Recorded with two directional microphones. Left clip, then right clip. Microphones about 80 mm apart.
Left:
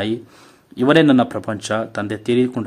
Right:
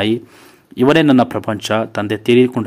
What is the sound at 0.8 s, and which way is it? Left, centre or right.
Speech, right.